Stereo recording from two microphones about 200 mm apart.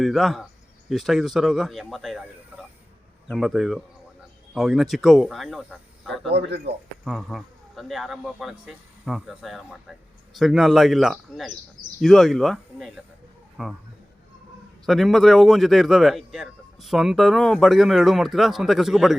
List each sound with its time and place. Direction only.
0.0 s a man's voice: centre (ahead or behind)
6.3 s speech: 60° right (ahead or behind)
7.0 s a man's voice: centre (ahead or behind)
14.8 s a man's voice: centre (ahead or behind)